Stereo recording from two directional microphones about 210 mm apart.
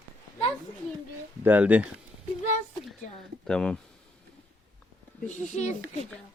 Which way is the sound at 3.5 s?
5° left (ahead or behind).